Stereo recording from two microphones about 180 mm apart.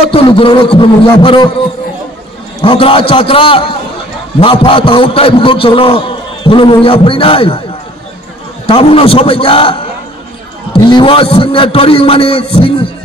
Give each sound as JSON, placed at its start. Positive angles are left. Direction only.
{"t": 0.1, "sound": "a man's voice", "side_deg": 30}
{"t": 2.6, "sound": "a man's voice", "side_deg": 30}
{"t": 8.6, "sound": "a man's voice", "side_deg": 30}